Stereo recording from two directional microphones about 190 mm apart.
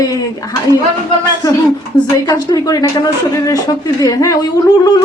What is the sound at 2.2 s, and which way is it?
Speech, 20° left (ahead or behind).